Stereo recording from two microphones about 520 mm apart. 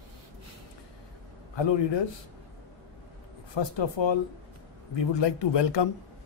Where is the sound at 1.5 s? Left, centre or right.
Left.